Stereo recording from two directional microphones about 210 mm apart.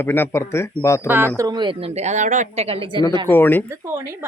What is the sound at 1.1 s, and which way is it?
A woman's voice, 10° right (ahead or behind).